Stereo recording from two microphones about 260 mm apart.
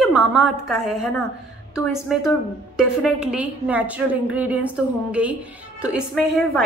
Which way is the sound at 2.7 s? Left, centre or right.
Centre.